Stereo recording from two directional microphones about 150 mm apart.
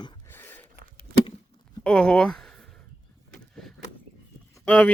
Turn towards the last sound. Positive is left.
turn(degrees=10)  # may be behind; listen again after turning